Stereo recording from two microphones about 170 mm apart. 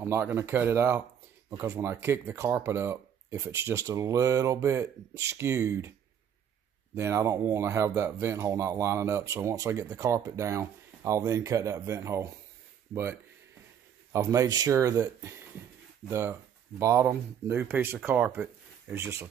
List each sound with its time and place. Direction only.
0.0 s speech: 15° right (ahead or behind)
7.0 s speech: 15° right (ahead or behind)